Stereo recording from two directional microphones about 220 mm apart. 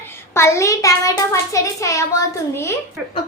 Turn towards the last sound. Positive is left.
turn(degrees=10)  # may be behind; listen again after turning